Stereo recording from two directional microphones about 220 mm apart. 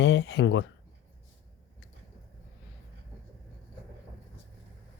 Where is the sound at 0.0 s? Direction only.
55° left (ahead or behind).